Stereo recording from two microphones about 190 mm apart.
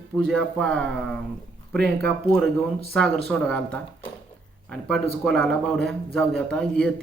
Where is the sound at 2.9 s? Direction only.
5° left (ahead or behind).